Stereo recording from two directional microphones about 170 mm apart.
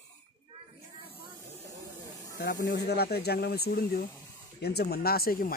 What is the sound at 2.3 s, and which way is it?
Speech, 65° left (ahead or behind).